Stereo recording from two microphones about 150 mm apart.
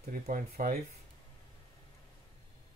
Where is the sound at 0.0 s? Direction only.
75° right (ahead or behind).